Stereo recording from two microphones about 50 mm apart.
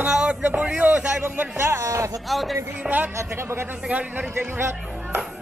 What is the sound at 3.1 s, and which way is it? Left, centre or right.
Speech, right.